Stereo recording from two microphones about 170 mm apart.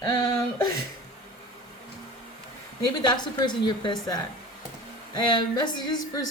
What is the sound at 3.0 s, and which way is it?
Speech, 25° left (ahead or behind).